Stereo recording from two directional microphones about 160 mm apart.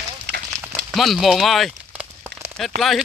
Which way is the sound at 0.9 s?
Centre (ahead or behind).